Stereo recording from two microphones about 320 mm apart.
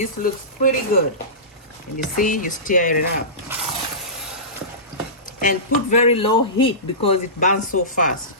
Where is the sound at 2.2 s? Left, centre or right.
Left.